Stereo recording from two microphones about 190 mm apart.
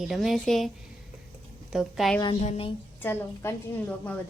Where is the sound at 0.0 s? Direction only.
Centre (ahead or behind).